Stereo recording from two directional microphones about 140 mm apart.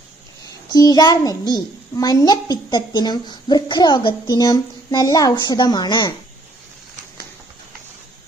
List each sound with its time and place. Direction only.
0.7 s a child's voice: 30° left (ahead or behind)